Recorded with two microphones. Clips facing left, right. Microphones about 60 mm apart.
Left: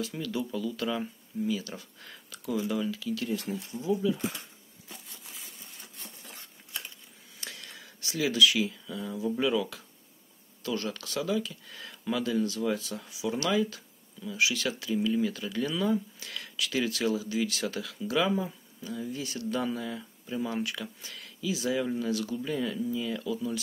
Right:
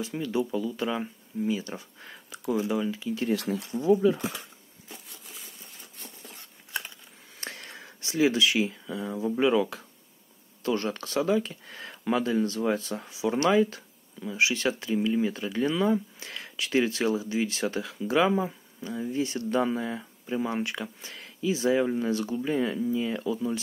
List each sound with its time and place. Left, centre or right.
0.0 s speech: right
3.3 s speech: right
3.9 s speech: right
7.3 s speech: right